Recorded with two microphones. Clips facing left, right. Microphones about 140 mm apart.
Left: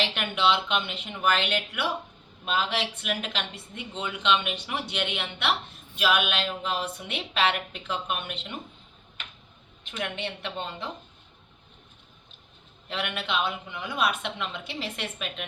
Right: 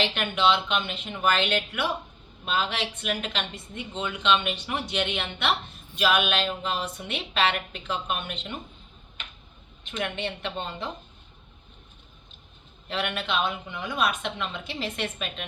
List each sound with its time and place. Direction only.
0.0 s speech: 10° left (ahead or behind)
9.9 s speech: 5° left (ahead or behind)
12.9 s speech: 5° left (ahead or behind)